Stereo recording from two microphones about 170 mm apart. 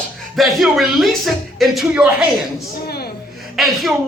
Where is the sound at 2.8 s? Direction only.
65° left (ahead or behind).